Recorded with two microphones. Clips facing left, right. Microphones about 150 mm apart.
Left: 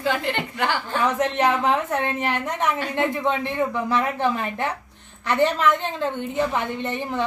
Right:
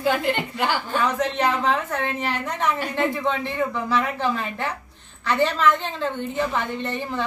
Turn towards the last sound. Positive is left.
turn(degrees=15)  # may be behind; listen again after turning